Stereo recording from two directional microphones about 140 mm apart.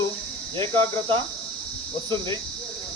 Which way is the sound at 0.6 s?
20° left (ahead or behind).